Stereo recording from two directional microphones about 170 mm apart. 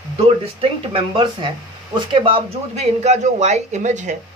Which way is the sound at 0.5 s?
35° right (ahead or behind).